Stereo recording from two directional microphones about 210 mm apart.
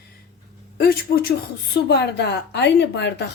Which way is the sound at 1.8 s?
55° left (ahead or behind).